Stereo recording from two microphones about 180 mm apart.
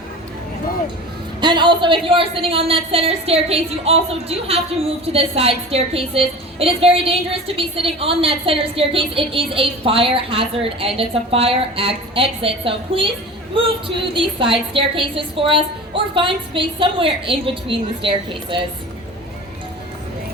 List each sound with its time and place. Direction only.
1.4 s a woman's voice: 25° right (ahead or behind)